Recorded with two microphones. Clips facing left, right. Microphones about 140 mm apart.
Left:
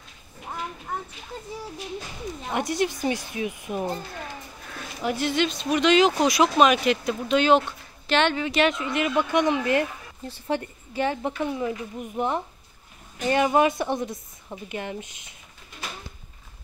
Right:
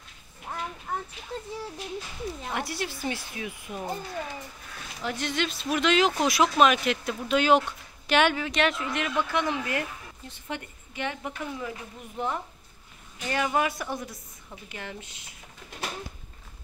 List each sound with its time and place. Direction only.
0.5 s a sound: 5° left (ahead or behind)
2.5 s speech: 20° left (ahead or behind)
5.0 s speech: 5° left (ahead or behind)
9.0 s speech: 15° left (ahead or behind)